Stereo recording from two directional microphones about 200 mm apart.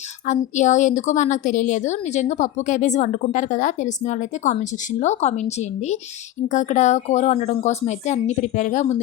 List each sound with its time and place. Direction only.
0.3 s a woman's voice: 35° left (ahead or behind)